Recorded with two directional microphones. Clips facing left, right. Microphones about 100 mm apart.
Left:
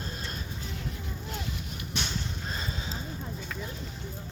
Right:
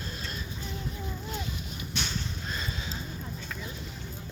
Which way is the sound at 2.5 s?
35° left (ahead or behind).